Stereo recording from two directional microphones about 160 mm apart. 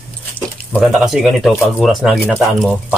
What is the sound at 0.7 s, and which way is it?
Speech, 5° right (ahead or behind).